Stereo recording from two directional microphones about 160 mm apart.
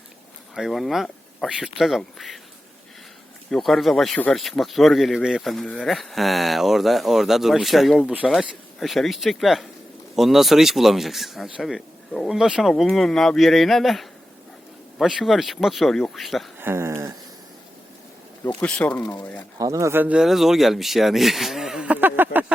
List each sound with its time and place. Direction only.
0.5 s speech: centre (ahead or behind)
3.5 s speech: centre (ahead or behind)
16.6 s speech: 15° right (ahead or behind)
18.4 s speech: 5° left (ahead or behind)
19.5 s speech: 20° right (ahead or behind)